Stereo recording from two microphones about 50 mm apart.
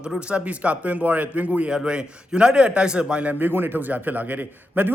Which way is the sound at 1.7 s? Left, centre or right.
Centre.